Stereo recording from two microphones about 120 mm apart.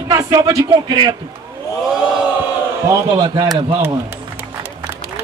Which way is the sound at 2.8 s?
35° right (ahead or behind).